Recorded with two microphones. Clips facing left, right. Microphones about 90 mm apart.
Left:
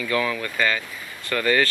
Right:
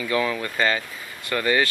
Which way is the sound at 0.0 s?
20° right (ahead or behind).